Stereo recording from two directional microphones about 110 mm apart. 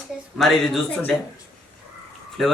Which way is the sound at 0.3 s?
Centre (ahead or behind).